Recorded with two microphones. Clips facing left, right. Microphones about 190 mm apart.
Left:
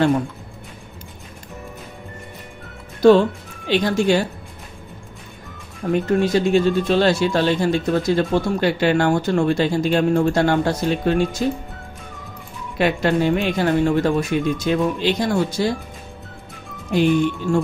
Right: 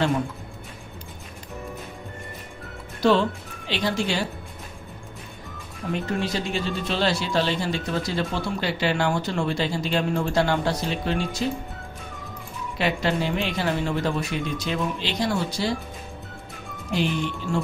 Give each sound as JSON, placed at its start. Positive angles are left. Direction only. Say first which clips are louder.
{"t": 3.0, "sound": "speech", "louder": "left 8 dB", "side_deg": 45}
{"t": 5.8, "sound": "speech", "louder": "left 8 dB", "side_deg": 45}
{"t": 12.7, "sound": "speech", "louder": "left 6 dB", "side_deg": 50}